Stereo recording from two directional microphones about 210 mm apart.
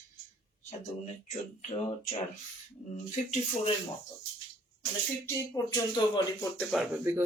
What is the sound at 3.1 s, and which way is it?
Speech, 35° left (ahead or behind).